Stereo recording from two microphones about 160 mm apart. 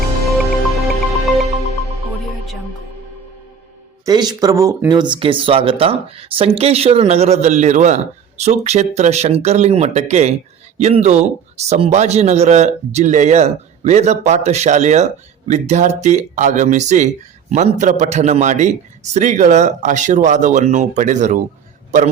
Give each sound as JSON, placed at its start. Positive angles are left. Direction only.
{"t": 0.8, "sound": "music", "side_deg": 0}
{"t": 4.0, "sound": "a man's voice", "side_deg": -25}